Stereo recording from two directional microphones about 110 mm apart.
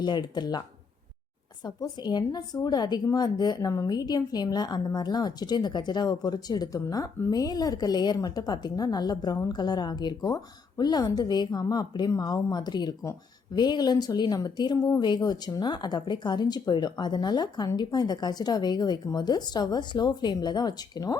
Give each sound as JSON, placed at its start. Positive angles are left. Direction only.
{"t": 0.0, "sound": "a woman's voice", "side_deg": 40}
{"t": 1.6, "sound": "a woman's voice", "side_deg": 40}